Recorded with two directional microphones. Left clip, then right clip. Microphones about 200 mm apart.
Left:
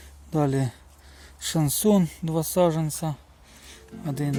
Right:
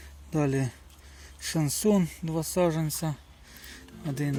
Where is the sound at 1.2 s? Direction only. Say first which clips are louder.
Left 4 dB; 25° left (ahead or behind).